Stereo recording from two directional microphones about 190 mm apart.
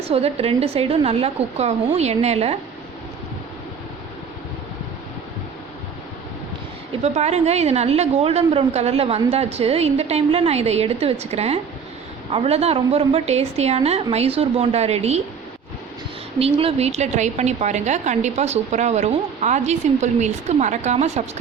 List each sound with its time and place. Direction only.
0.0 s a woman's voice: 30° right (ahead or behind)
7.0 s a woman's voice: 35° right (ahead or behind)
16.4 s a woman's voice: 30° right (ahead or behind)